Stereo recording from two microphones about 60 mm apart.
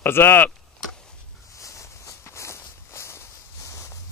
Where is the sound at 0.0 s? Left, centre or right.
Left.